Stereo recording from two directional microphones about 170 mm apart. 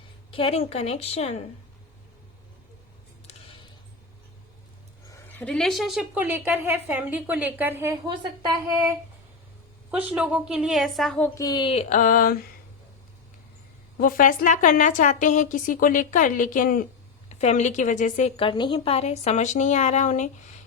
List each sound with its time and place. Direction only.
0.3 s a woman's voice: 35° left (ahead or behind)
5.1 s a woman's voice: 10° left (ahead or behind); by 8.1 s 15° right (ahead or behind)
8.1 s a woman's voice: 25° right (ahead or behind)
9.9 s a woman's voice: 10° right (ahead or behind)
11.3 s speech: 25° left (ahead or behind)
11.9 s a woman's voice: 50° left (ahead or behind)
14.0 s a woman's voice: 55° left (ahead or behind)
17.2 s a woman's voice: 40° left (ahead or behind)
18.3 s a woman's voice: 30° left (ahead or behind); by 20.3 s 45° left (ahead or behind)